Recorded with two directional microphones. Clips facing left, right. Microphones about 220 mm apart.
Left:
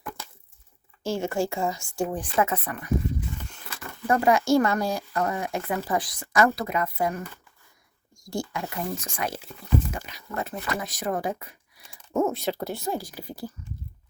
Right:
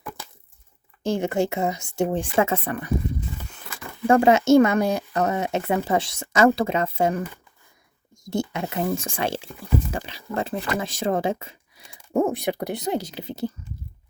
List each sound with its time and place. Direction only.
1.0 s speech: 20° right (ahead or behind)
4.0 s speech: 25° right (ahead or behind)
8.3 s speech: 20° right (ahead or behind)
12.3 s speech: 15° right (ahead or behind)